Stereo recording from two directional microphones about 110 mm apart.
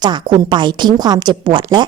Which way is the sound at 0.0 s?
45° right (ahead or behind).